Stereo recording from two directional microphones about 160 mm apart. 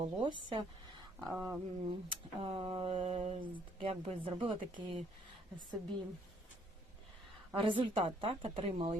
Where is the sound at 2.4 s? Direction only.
35° right (ahead or behind).